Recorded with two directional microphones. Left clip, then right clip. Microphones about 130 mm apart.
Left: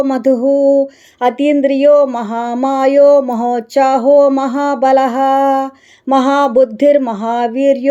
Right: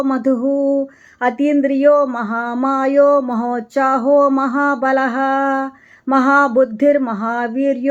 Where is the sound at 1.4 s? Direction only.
45° left (ahead or behind).